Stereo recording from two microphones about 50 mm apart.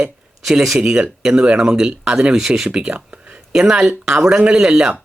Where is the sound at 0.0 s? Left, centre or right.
Centre.